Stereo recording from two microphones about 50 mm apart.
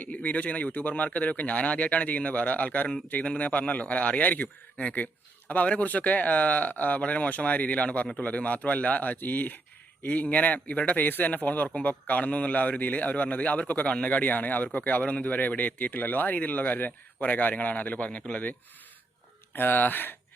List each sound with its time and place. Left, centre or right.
0.0 s speech: left
19.5 s speech: left